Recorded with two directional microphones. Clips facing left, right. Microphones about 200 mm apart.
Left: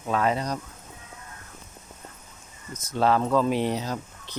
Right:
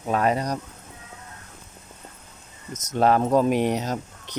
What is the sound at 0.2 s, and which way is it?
Speech, 40° right (ahead or behind).